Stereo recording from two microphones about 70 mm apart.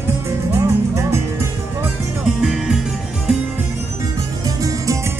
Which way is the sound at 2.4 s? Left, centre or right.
Centre.